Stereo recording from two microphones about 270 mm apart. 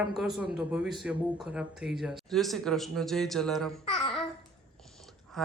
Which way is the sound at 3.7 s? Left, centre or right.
Left.